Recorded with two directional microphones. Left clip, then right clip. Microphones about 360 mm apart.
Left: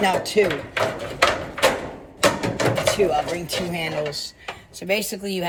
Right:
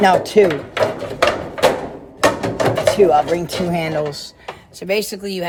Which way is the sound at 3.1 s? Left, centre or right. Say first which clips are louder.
Right 8 dB; right.